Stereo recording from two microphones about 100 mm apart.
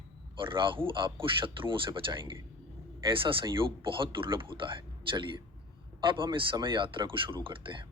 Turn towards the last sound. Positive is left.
turn(degrees=-60)  # may be behind; listen again after turning